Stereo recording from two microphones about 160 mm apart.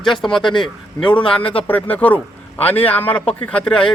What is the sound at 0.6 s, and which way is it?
A man's voice, 5° left (ahead or behind).